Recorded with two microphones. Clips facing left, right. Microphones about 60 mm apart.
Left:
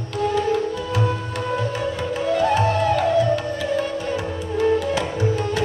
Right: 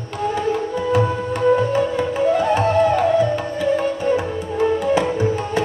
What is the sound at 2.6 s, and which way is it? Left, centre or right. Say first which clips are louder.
Music: right 3 dB; right.